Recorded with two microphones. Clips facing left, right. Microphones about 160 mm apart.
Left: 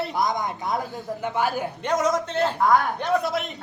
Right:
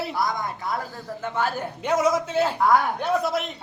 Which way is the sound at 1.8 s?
5° right (ahead or behind).